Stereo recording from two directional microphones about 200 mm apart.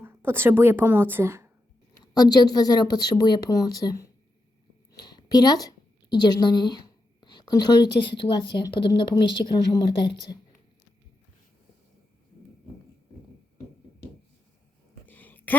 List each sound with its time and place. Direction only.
0.0 s a woman's voice: 10° right (ahead or behind)
2.1 s a woman's voice: 20° left (ahead or behind)
15.0 s a sound: 10° left (ahead or behind)